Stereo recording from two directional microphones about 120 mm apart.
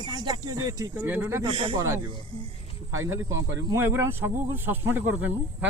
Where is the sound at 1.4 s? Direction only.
40° right (ahead or behind).